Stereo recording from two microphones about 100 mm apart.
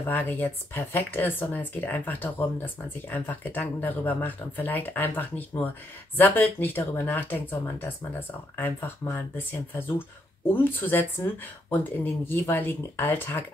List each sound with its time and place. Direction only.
0.0 s speech: 20° left (ahead or behind)